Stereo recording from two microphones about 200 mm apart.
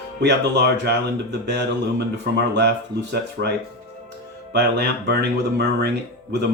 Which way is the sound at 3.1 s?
55° right (ahead or behind).